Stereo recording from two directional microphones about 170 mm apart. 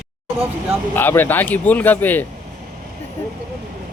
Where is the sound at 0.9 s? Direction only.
10° left (ahead or behind).